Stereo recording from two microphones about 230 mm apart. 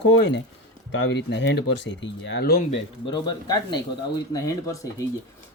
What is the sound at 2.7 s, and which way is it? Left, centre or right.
Speech, centre.